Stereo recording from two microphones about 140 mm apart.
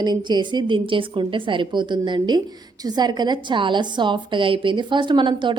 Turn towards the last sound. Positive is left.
turn(degrees=-35)  # may be behind; listen again after turning